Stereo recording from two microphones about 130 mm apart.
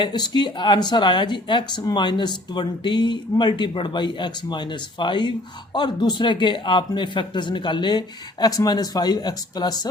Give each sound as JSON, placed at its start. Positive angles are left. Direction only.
{"t": 0.0, "sound": "speech", "side_deg": 35}